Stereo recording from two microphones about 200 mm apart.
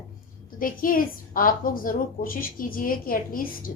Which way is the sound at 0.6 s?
45° left (ahead or behind).